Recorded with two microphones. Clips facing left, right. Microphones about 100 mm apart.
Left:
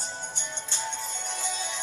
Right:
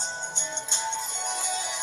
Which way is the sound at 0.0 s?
20° right (ahead or behind).